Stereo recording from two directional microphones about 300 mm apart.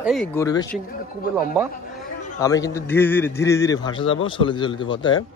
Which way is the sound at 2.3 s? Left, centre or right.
Centre.